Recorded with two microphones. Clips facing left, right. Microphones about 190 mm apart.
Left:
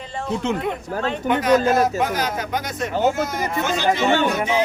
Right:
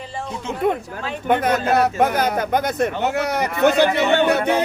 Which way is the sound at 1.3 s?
55° right (ahead or behind).